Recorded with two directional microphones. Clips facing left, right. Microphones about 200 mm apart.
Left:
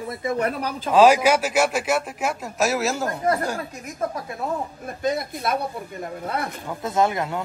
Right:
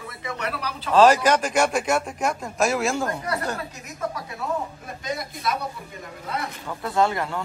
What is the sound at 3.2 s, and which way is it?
Speech, 45° left (ahead or behind).